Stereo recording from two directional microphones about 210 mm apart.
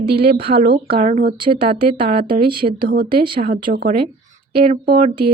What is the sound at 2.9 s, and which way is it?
Speech, 45° right (ahead or behind).